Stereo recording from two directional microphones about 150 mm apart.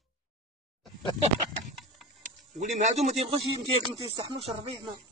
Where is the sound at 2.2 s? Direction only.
50° right (ahead or behind).